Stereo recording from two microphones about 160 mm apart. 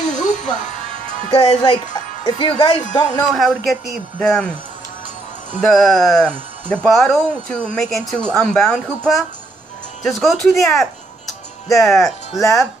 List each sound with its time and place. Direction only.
0.2 s music: 50° left (ahead or behind)
1.3 s speech: 35° left (ahead or behind)
3.3 s speech: centre (ahead or behind)
5.6 s speech: centre (ahead or behind)